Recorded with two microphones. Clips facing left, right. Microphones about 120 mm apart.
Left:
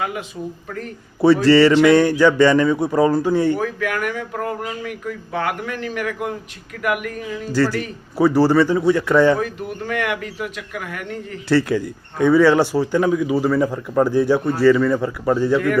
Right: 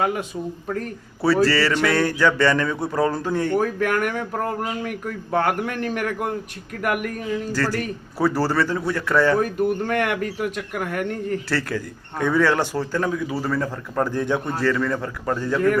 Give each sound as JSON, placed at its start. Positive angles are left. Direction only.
{"t": 1.5, "sound": "speech", "side_deg": 20}
{"t": 3.5, "sound": "a man's voice", "side_deg": -45}
{"t": 8.2, "sound": "speech", "side_deg": 15}
{"t": 9.4, "sound": "a man's voice", "side_deg": -50}
{"t": 11.4, "sound": "speech", "side_deg": 15}